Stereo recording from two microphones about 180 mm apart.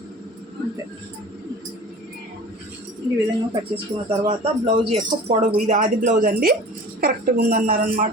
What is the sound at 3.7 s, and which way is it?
Speech, 35° right (ahead or behind).